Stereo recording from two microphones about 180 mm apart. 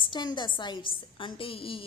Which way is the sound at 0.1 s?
25° left (ahead or behind).